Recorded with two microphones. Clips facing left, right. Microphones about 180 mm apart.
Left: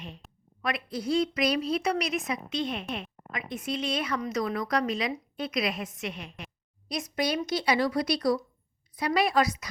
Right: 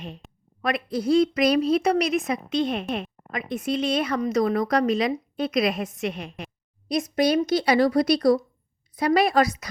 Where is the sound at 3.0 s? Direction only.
45° right (ahead or behind).